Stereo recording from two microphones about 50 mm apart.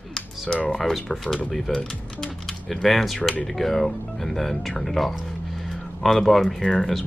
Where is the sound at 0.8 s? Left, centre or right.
Centre.